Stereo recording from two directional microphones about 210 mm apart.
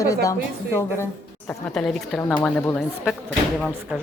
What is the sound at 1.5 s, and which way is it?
Speech, 5° left (ahead or behind).